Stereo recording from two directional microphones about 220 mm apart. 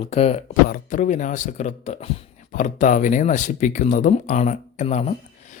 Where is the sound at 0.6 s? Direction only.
40° left (ahead or behind).